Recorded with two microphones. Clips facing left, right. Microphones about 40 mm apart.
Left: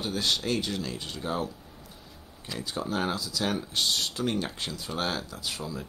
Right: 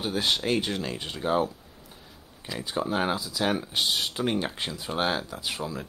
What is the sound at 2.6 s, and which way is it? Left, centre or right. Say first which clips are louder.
Speech: right 3 dB; right.